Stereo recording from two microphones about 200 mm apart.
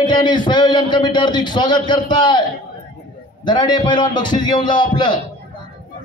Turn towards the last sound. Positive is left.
turn(degrees=20)  # may be behind; listen again after turning